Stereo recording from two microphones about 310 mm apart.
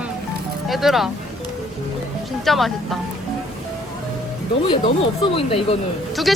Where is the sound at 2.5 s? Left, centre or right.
Centre.